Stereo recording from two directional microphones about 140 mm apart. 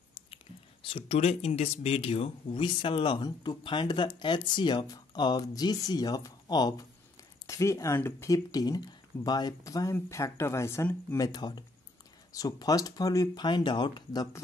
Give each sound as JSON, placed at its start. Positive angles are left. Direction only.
{"t": 0.8, "sound": "speech", "side_deg": 45}